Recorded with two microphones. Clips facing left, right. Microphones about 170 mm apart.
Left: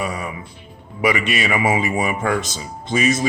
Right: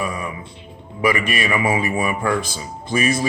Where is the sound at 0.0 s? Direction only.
20° left (ahead or behind).